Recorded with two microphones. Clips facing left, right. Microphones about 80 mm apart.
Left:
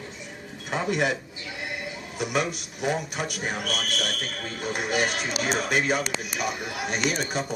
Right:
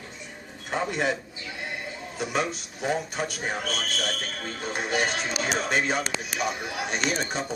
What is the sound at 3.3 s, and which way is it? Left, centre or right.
Speech, right.